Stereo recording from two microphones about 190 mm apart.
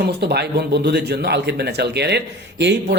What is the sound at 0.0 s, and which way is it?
Speech, 60° right (ahead or behind).